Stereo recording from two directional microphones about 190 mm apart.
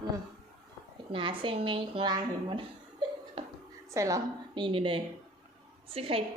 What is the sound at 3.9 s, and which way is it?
A woman's voice, 15° right (ahead or behind).